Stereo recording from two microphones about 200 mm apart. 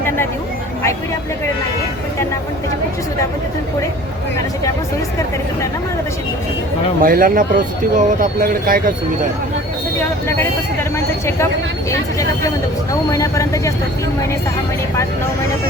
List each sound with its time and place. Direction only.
7.0 s speech: 45° right (ahead or behind)
12.9 s speech: 15° left (ahead or behind)